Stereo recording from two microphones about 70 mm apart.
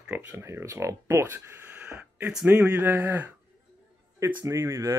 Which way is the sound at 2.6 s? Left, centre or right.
Right.